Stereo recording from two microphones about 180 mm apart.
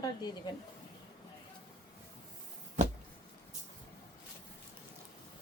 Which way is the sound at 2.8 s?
40° right (ahead or behind).